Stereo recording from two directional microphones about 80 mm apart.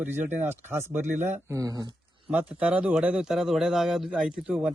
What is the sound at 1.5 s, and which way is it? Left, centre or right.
Speech, right.